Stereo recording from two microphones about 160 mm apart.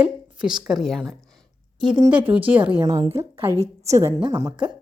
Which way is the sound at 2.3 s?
10° right (ahead or behind).